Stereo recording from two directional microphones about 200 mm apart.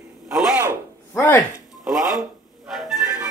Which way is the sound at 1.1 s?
10° left (ahead or behind).